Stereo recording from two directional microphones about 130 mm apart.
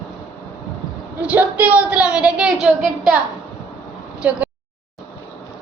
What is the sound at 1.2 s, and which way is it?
A woman's voice, 10° right (ahead or behind).